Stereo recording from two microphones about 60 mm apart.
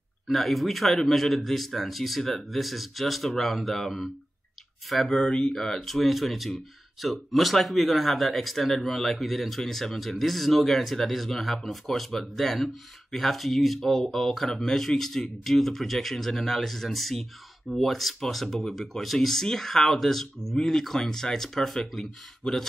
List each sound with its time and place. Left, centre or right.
0.3 s speech: centre